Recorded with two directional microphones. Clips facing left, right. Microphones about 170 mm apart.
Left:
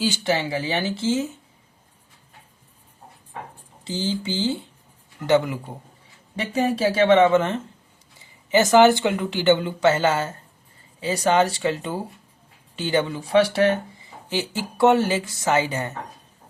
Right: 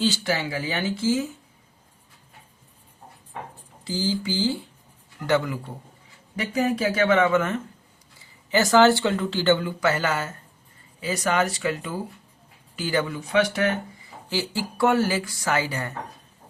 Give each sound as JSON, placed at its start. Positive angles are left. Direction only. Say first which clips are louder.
{"t": 0.3, "sound": "speech", "louder": "left 3 dB", "side_deg": 25}
{"t": 3.8, "sound": "speech", "louder": "even", "side_deg": 25}
{"t": 14.3, "sound": "speech", "louder": "left 1 dB", "side_deg": 20}